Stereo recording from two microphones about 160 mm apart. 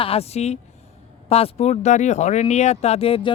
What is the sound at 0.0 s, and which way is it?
Speech, 40° left (ahead or behind).